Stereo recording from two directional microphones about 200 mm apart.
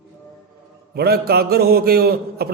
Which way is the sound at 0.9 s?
50° right (ahead or behind).